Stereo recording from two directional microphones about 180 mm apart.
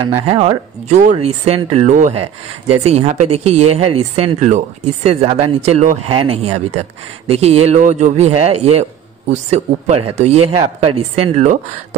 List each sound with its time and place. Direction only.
0.3 s speech: 35° right (ahead or behind)